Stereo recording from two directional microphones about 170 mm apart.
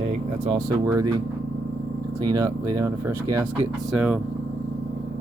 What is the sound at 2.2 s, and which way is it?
Speech, 20° right (ahead or behind).